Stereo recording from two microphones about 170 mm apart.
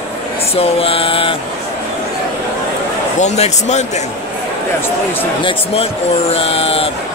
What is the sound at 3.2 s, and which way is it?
Speech, 40° left (ahead or behind).